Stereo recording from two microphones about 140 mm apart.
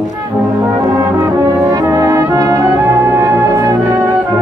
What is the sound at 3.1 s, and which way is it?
Music, 20° right (ahead or behind).